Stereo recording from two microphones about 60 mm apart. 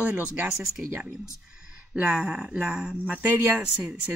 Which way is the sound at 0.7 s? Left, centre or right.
Right.